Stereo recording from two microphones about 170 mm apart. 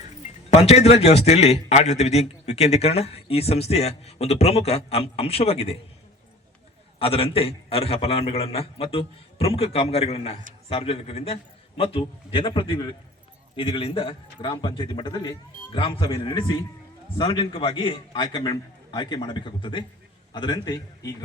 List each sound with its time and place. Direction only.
0.5 s a man's voice: 40° left (ahead or behind)
7.0 s a man's voice: 35° left (ahead or behind)